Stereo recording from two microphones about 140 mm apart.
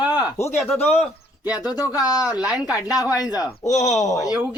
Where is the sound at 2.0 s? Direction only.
25° left (ahead or behind).